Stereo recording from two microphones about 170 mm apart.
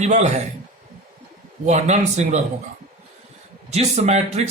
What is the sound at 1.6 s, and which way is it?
Speech, 40° right (ahead or behind).